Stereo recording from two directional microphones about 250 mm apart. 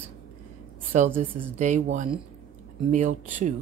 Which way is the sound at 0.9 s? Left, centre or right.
Right.